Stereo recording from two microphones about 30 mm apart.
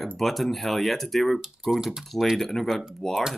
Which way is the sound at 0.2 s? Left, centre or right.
Centre.